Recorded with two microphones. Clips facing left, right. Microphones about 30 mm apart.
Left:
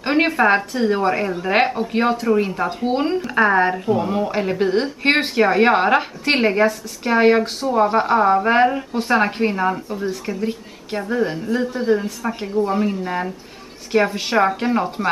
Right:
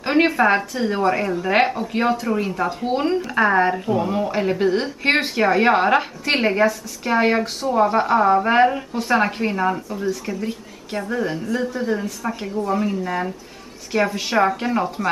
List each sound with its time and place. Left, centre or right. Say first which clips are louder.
0.0 s a woman's voice: even; centre
12.5 s speech: left 3 dB; left
13.9 s speech: left 2 dB; centre